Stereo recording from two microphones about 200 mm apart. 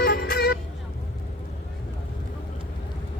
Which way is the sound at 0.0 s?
50° left (ahead or behind).